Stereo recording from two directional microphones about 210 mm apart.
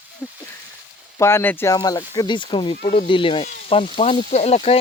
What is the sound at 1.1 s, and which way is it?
Speech, 10° left (ahead or behind).